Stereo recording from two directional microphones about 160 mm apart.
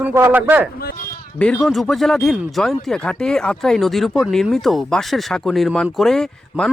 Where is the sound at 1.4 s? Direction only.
5° left (ahead or behind).